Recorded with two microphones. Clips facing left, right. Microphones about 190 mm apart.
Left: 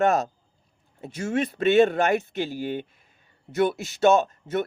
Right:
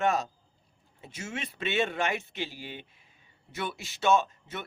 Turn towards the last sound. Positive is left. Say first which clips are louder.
# left 5 dB
turn(degrees=40)  # may be behind; listen again after turning